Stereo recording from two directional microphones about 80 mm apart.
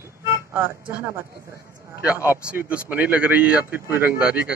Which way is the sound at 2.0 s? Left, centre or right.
Right.